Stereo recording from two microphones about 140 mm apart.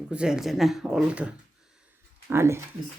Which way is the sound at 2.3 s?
20° right (ahead or behind).